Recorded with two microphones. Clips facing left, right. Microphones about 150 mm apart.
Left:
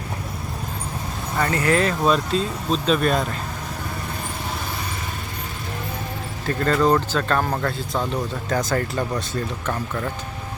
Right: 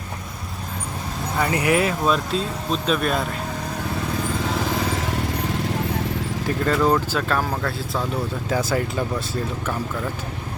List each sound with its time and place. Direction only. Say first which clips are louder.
1.4 s speech: even; 15° right (ahead or behind)
4.7 s vehicle: right 7 dB; 90° right
6.7 s speech: left 1 dB; 5° right (ahead or behind)